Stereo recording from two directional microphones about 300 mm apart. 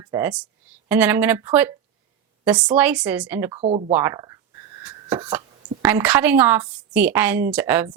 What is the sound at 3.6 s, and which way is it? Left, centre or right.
Speech, right.